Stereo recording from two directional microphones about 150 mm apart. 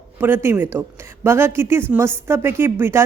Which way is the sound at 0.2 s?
15° right (ahead or behind).